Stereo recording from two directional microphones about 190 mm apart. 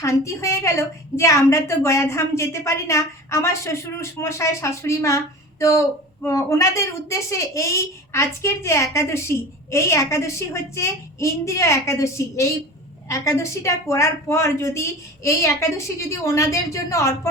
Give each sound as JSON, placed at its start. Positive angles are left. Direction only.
{"t": 0.0, "sound": "a woman's voice", "side_deg": 15}